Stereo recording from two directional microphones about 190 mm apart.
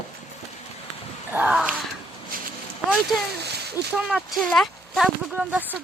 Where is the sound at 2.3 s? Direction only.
50° right (ahead or behind).